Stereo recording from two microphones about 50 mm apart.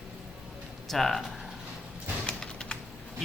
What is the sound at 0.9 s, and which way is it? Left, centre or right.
Speech, centre.